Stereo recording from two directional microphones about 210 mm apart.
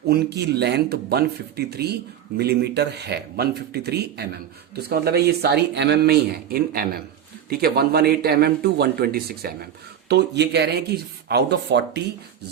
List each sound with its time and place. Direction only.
0.1 s speech: 50° right (ahead or behind)